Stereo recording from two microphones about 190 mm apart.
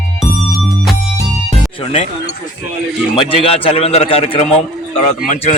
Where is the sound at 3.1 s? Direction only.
30° left (ahead or behind).